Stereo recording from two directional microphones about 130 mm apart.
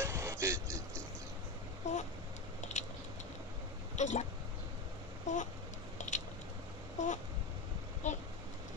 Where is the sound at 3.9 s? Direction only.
65° left (ahead or behind).